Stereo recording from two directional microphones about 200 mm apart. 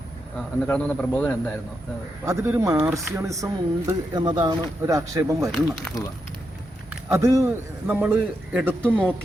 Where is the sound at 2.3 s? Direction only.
15° right (ahead or behind).